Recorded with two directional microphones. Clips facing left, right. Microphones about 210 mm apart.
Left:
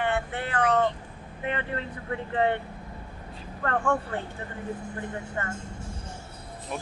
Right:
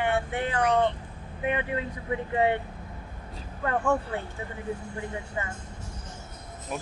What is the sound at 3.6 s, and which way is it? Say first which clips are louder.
Speech: right 1 dB; 10° right (ahead or behind).